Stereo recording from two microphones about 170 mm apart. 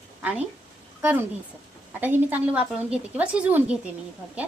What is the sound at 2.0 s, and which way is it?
A woman's voice, 10° right (ahead or behind).